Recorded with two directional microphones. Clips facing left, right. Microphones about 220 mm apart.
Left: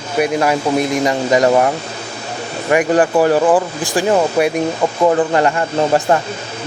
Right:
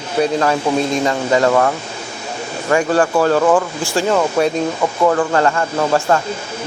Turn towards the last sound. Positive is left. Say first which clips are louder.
# left 1 dB
turn(degrees=20)  # may be behind; listen again after turning